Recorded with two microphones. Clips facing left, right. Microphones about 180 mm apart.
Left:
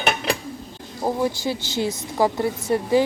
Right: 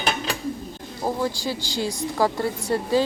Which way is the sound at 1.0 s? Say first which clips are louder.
Left 3 dB; 20° left (ahead or behind).